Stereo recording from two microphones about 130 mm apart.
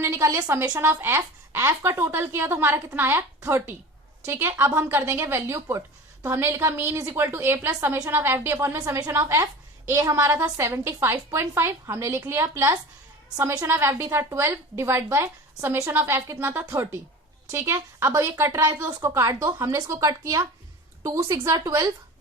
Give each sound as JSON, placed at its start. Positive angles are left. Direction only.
{"t": 0.0, "sound": "a woman's voice", "side_deg": -20}